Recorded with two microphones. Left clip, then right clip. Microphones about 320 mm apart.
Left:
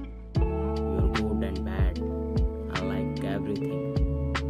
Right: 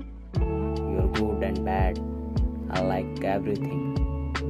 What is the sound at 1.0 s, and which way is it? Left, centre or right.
Music, centre.